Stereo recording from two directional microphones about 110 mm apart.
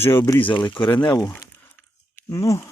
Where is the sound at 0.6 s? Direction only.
50° left (ahead or behind).